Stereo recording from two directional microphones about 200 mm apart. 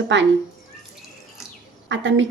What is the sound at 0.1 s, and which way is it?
Speech, 65° right (ahead or behind).